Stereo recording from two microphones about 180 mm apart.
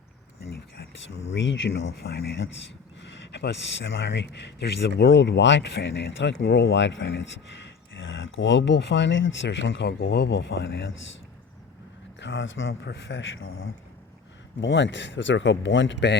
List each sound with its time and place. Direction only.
1.3 s a man's voice: 90° left
2.0 s speech: 70° left (ahead or behind)
3.0 s speech: 80° left
12.2 s a man's voice: 90° left